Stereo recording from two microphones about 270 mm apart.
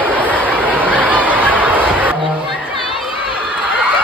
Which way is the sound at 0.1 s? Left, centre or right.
Centre.